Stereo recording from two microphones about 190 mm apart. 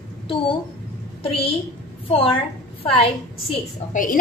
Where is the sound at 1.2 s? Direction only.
30° left (ahead or behind).